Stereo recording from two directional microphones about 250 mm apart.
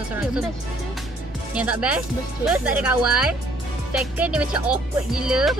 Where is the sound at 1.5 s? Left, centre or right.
Centre.